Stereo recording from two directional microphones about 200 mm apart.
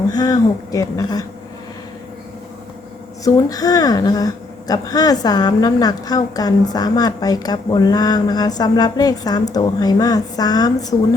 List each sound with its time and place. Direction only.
0.1 s speech: 20° left (ahead or behind)
3.2 s speech: 20° left (ahead or behind)